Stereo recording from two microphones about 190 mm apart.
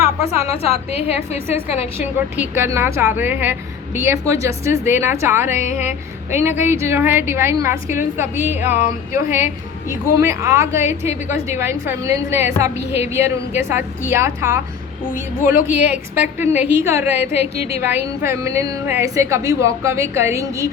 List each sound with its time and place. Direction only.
0.2 s a woman's voice: 35° left (ahead or behind)
2.4 s a woman's voice: 15° right (ahead or behind)
15.1 s a woman's voice: 45° left (ahead or behind)
15.6 s a woman's voice: 10° right (ahead or behind)